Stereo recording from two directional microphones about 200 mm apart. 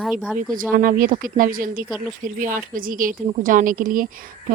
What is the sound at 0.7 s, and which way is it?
Speech, 45° right (ahead or behind).